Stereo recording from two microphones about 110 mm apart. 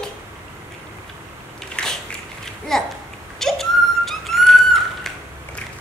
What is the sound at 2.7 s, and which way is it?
Speech, 5° left (ahead or behind).